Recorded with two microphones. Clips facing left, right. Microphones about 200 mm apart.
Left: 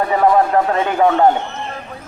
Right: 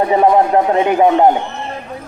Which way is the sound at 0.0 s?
20° right (ahead or behind).